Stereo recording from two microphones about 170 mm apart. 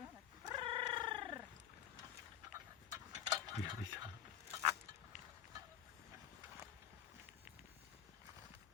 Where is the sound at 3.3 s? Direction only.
25° right (ahead or behind).